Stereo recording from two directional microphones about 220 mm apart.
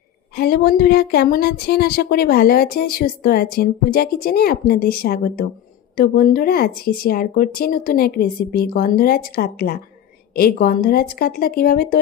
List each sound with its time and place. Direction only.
0.4 s speech: 45° left (ahead or behind)